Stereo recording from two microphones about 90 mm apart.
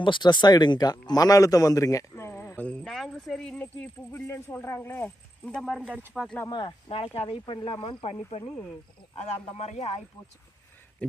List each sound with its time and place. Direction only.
0.0 s a man's voice: 60° left (ahead or behind); by 2.6 s 30° left (ahead or behind)
2.8 s a woman's voice: 5° left (ahead or behind)
4.1 s a man's voice: 30° left (ahead or behind)
5.5 s speech: centre (ahead or behind)
5.8 s speech: 20° right (ahead or behind)
6.5 s speech: 60° left (ahead or behind); by 8.1 s 80° left